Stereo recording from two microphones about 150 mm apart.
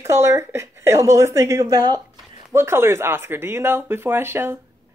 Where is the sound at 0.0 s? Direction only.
20° right (ahead or behind).